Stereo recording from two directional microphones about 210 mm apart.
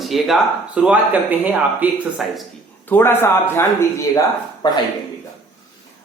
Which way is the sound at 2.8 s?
10° left (ahead or behind).